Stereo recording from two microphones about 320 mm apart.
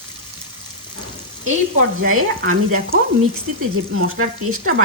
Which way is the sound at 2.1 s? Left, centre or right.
Right.